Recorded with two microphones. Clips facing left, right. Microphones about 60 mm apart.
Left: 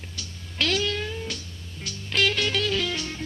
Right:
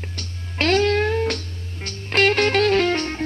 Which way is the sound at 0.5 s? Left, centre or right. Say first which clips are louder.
Right 8 dB; right.